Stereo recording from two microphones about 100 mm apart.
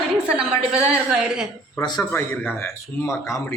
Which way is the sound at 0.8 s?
10° right (ahead or behind).